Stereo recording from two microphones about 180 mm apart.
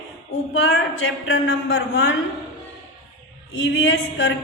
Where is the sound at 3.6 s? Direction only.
90° left.